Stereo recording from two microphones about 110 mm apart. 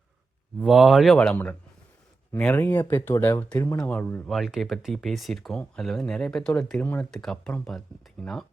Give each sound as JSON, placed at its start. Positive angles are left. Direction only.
{"t": 0.6, "sound": "speech", "side_deg": -5}
{"t": 2.6, "sound": "speech", "side_deg": 20}
{"t": 4.3, "sound": "speech", "side_deg": 0}
{"t": 6.8, "sound": "speech", "side_deg": 15}
{"t": 7.1, "sound": "speech", "side_deg": 5}